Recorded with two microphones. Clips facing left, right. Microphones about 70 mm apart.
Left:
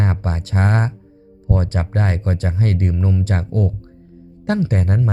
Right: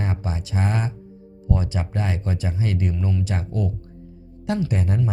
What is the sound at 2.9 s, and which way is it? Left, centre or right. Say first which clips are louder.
Speech: left 5 dB; left.